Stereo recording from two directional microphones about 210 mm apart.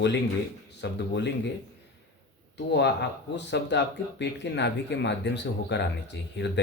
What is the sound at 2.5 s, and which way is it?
Speech, 55° left (ahead or behind).